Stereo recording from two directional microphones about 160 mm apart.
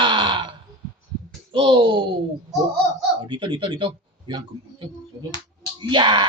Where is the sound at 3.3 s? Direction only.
30° right (ahead or behind).